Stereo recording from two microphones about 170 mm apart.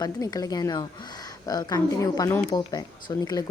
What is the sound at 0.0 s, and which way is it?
A woman's voice, 20° left (ahead or behind).